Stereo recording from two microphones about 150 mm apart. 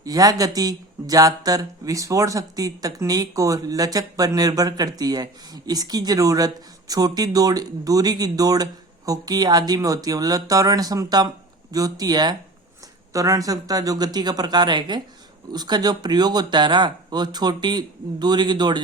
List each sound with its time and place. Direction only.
0.0 s speech: 25° right (ahead or behind)